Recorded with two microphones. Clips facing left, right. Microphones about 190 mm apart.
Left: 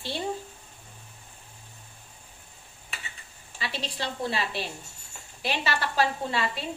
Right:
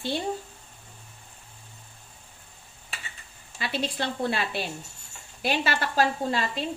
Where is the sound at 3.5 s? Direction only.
55° right (ahead or behind).